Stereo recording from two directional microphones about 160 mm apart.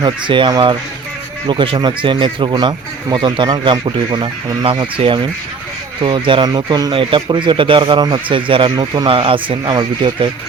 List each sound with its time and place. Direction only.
0.0 s a man's voice: 30° right (ahead or behind)